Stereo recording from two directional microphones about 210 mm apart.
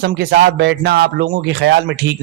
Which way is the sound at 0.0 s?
45° right (ahead or behind).